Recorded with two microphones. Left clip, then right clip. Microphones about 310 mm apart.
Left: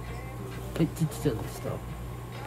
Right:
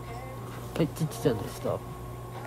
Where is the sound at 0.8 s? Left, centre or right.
Centre.